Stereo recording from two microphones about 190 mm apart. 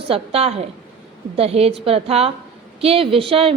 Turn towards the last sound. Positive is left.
turn(degrees=-30)  # may be behind; listen again after turning